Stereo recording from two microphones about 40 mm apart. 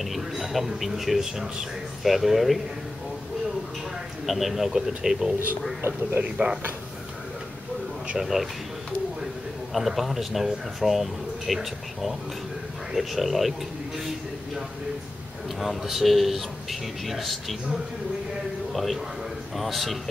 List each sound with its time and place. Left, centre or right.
0.0 s a man's voice: centre
4.3 s speech: centre
6.2 s speech: right
8.2 s speech: centre
9.8 s speech: centre
15.6 s speech: centre
18.7 s a man's voice: centre